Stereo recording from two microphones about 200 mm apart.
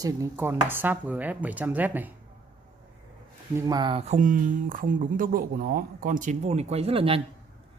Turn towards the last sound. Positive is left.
turn(degrees=-30)  # may be behind; listen again after turning